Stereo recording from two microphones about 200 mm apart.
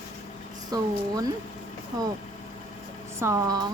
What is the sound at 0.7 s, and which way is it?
Speech, 20° right (ahead or behind).